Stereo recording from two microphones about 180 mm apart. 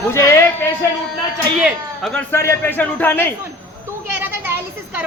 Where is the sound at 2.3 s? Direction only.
15° left (ahead or behind).